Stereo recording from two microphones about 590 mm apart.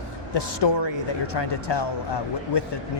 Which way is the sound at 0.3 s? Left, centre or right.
Left.